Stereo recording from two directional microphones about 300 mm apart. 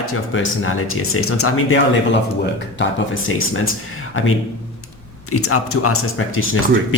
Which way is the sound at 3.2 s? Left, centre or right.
Left.